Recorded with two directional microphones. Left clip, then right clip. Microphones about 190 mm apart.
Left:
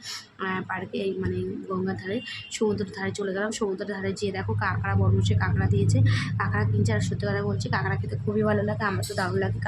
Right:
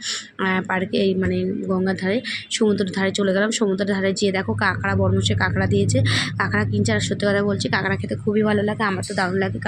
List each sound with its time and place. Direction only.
0.4 s a woman's voice: 20° right (ahead or behind)